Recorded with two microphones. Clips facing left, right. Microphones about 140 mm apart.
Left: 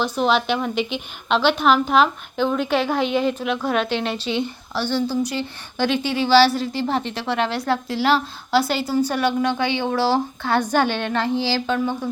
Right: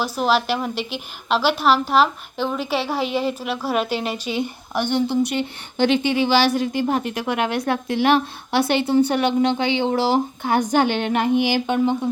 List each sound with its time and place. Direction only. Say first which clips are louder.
0.0 s a woman's voice: even; 5° right (ahead or behind); by 11.9 s 20° right (ahead or behind)